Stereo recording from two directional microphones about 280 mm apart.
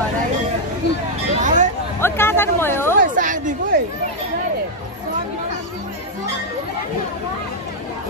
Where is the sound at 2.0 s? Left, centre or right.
Centre.